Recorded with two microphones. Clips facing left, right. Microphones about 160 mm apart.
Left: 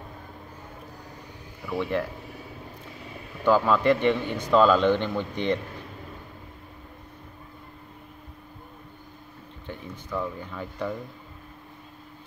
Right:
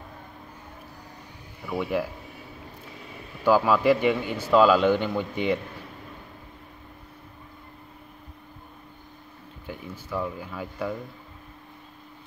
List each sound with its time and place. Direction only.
1.7 s a man's voice: 10° right (ahead or behind)
3.4 s a man's voice: 10° right (ahead or behind)
9.7 s speech: 5° right (ahead or behind)